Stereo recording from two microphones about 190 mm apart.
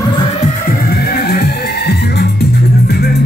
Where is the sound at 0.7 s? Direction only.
55° left (ahead or behind).